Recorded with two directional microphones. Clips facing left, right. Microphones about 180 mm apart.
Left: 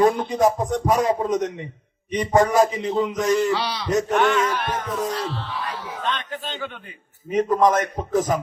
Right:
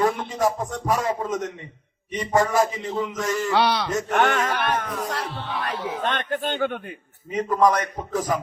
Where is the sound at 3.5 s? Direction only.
60° right (ahead or behind).